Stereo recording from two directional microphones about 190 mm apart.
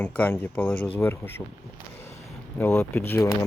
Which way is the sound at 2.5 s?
10° left (ahead or behind).